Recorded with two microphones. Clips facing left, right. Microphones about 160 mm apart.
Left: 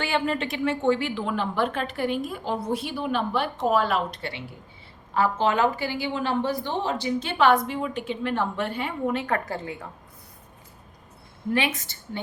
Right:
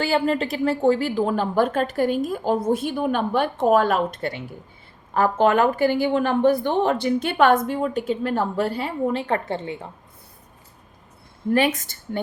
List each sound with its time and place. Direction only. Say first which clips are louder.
0.0 s a woman's voice: right 5 dB; 35° right (ahead or behind)
11.5 s a woman's voice: right 6 dB; 45° right (ahead or behind)